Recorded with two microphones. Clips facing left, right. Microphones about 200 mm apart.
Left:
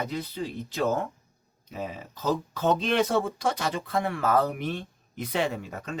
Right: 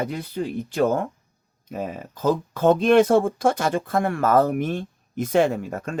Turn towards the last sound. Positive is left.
turn(degrees=-50)  # may be behind; listen again after turning